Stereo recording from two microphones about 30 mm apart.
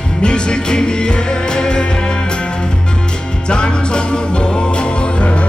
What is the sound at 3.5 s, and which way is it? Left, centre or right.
Music, left.